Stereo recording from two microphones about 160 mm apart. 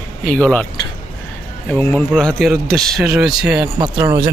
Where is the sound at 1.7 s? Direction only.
10° left (ahead or behind); by 3.7 s 5° right (ahead or behind).